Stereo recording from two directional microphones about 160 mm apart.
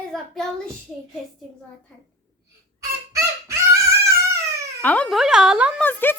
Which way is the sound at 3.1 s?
20° right (ahead or behind).